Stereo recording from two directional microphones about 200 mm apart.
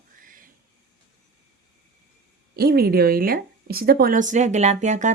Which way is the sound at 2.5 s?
50° right (ahead or behind).